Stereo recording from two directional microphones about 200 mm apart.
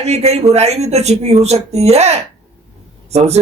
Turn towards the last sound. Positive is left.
turn(degrees=-30)  # may be behind; listen again after turning